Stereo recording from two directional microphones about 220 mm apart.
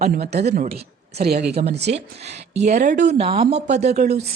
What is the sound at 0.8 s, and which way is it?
Speech, 45° right (ahead or behind).